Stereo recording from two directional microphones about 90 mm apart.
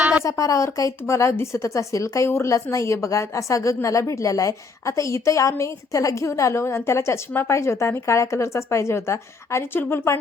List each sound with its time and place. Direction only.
0.3 s speech: 35° left (ahead or behind)